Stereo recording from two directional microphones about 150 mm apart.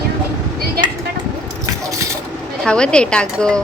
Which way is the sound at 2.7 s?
5° left (ahead or behind).